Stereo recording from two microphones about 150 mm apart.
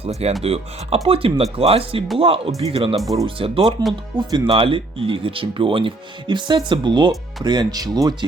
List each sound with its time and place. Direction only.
0.0 s speech: 45° right (ahead or behind); by 8.1 s 25° right (ahead or behind)